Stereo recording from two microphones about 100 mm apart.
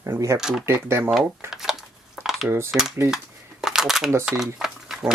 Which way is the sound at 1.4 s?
5° right (ahead or behind).